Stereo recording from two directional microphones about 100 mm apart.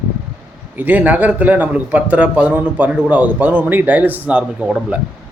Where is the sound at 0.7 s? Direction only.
20° right (ahead or behind).